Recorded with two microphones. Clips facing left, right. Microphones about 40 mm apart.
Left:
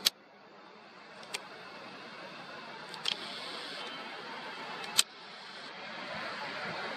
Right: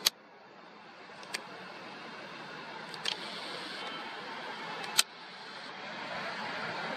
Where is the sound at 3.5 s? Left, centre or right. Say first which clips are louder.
Right 1 dB; right.